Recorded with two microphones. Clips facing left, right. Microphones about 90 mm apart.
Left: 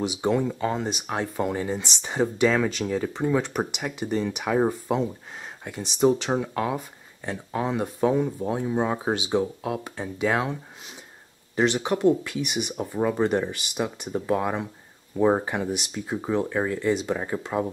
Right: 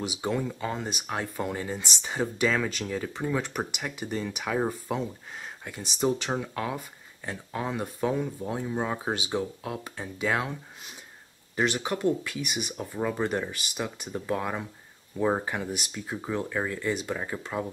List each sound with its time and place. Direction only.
0.4 s speech: 15° left (ahead or behind)